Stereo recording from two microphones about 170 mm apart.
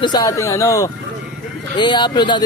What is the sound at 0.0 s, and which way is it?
Speech, 20° left (ahead or behind).